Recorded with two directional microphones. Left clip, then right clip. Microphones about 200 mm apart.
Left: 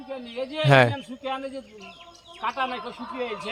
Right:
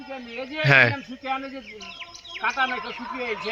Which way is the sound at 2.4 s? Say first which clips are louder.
Right 3 dB; 25° left (ahead or behind).